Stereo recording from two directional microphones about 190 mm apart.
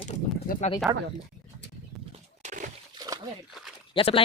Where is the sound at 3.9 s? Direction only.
30° left (ahead or behind).